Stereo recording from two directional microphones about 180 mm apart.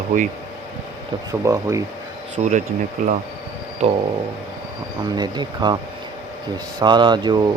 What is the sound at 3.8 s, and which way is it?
Speech, 40° right (ahead or behind).